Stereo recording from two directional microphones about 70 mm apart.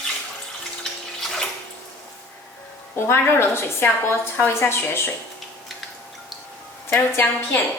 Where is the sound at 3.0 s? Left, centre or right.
Left.